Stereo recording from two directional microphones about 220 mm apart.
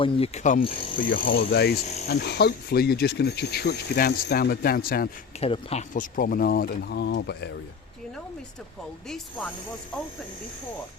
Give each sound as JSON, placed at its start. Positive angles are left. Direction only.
{"t": 0.0, "sound": "speech", "side_deg": 30}
{"t": 1.1, "sound": "speech", "side_deg": 45}
{"t": 5.4, "sound": "speech", "side_deg": 25}
{"t": 9.0, "sound": "speech", "side_deg": 0}